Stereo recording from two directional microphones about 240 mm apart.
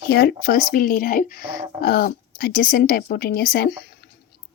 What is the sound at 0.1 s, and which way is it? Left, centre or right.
Speech, left.